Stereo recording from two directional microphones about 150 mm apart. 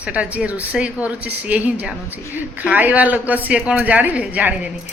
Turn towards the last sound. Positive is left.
turn(degrees=-10)  # may be behind; listen again after turning